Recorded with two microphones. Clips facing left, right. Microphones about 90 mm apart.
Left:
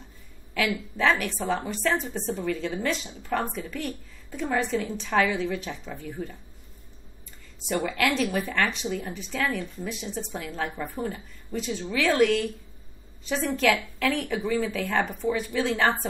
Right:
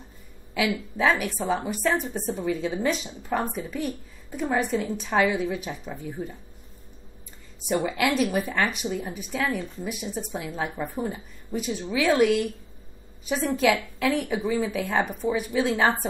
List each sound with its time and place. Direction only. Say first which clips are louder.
0.7 s a woman's voice: right 1 dB; 15° right (ahead or behind)
7.6 s a woman's voice: right 1 dB; 10° right (ahead or behind)